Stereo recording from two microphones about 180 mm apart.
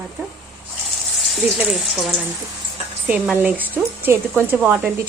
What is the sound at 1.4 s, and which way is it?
Speech, centre (ahead or behind).